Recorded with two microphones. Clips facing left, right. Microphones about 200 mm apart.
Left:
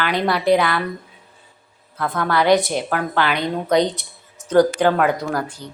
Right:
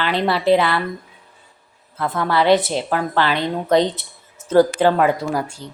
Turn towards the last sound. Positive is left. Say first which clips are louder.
# right 1 dB
turn(degrees=-10)  # may be behind; listen again after turning